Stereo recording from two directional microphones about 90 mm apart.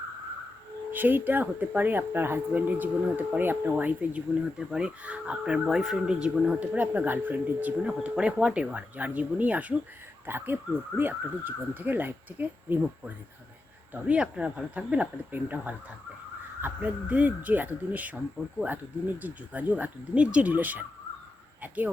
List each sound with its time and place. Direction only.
0.9 s speech: 20° right (ahead or behind)
13.9 s speech: 15° right (ahead or behind)